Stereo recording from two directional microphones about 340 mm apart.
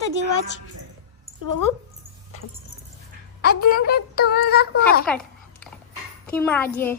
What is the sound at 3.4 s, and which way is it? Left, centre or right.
A woman's voice, left.